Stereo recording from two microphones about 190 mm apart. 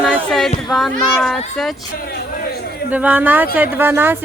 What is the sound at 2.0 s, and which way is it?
Speech, 55° left (ahead or behind).